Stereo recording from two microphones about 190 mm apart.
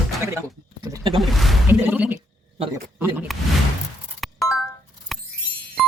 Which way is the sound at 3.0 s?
10° right (ahead or behind).